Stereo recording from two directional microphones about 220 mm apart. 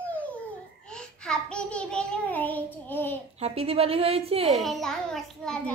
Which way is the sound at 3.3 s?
30° right (ahead or behind).